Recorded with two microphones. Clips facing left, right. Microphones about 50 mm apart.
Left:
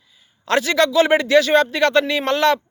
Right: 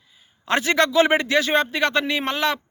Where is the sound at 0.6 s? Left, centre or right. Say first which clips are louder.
Left 1 dB; right.